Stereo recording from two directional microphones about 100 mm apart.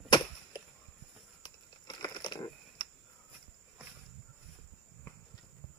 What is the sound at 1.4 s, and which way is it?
Crumpling, 50° left (ahead or behind).